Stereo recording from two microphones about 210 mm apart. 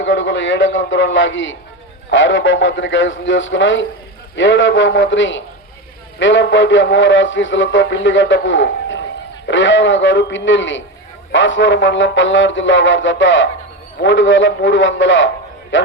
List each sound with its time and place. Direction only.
0.0 s a man's voice: 60° left (ahead or behind)